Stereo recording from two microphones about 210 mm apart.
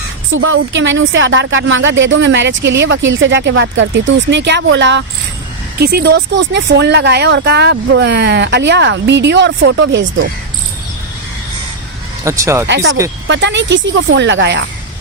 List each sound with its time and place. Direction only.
0.3 s speech: 65° right (ahead or behind)
12.2 s speech: 15° right (ahead or behind)
12.6 s speech: 60° right (ahead or behind)